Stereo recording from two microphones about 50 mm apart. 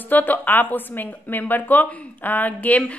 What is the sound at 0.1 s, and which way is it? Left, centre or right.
Speech, left.